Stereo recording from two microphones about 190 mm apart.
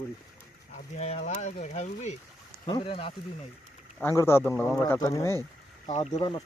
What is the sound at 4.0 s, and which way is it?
Speech, 15° left (ahead or behind).